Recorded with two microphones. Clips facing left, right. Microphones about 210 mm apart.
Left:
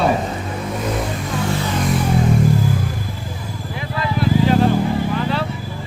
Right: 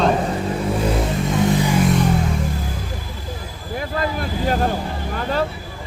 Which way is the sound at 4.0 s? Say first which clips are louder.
Left 8 dB; 45° right (ahead or behind).